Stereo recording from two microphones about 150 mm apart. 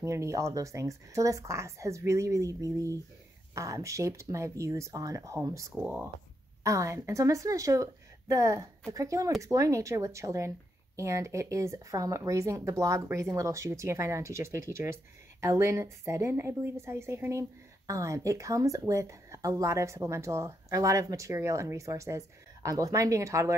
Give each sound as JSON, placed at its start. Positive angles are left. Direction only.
{"t": 0.0, "sound": "a woman's voice", "side_deg": -20}
{"t": 5.8, "sound": "speech", "side_deg": -10}
{"t": 6.6, "sound": "a woman's voice", "side_deg": -20}